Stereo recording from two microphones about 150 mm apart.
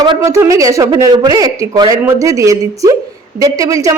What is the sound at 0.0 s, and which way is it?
A woman's voice, 25° right (ahead or behind).